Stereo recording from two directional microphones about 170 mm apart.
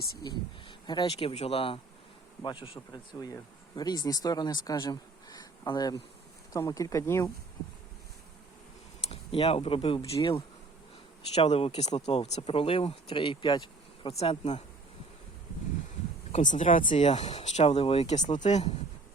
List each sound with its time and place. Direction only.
0.2 s speech: 25° left (ahead or behind)
9.0 s speech: 35° left (ahead or behind)
10.2 s bee: 30° left (ahead or behind)
11.3 s speech: 35° left (ahead or behind)
16.3 s speech: 45° left (ahead or behind)